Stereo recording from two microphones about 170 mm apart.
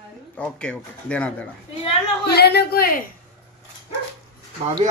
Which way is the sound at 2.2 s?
70° left (ahead or behind).